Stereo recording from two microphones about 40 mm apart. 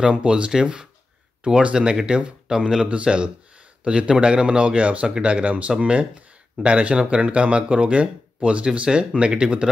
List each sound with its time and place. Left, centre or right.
0.1 s speech: right